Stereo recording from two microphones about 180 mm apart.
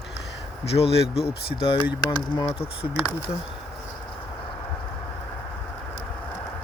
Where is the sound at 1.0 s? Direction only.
65° left (ahead or behind).